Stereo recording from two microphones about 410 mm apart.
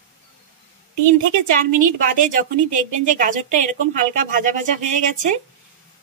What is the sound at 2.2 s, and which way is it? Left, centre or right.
Speech, centre.